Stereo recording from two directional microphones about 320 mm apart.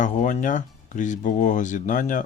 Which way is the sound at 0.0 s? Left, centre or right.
Left.